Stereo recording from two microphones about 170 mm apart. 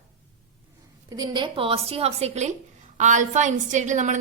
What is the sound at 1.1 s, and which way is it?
A woman's voice, 25° right (ahead or behind).